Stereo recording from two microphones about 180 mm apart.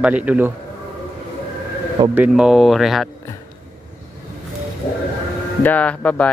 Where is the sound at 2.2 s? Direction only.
5° right (ahead or behind).